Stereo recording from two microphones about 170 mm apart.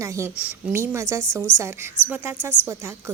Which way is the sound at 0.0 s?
15° right (ahead or behind).